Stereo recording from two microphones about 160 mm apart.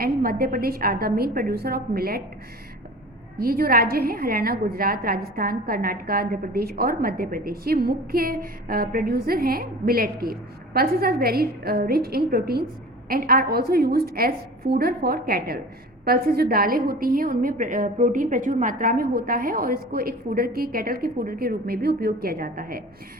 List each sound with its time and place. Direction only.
0.0 s a woman's voice: 65° right (ahead or behind)
3.3 s a woman's voice: 65° right (ahead or behind)